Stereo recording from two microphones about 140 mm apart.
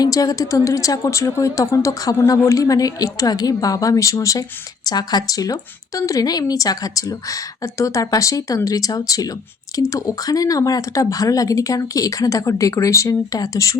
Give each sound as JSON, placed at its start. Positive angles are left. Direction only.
{"t": 0.0, "sound": "a woman's voice", "side_deg": 25}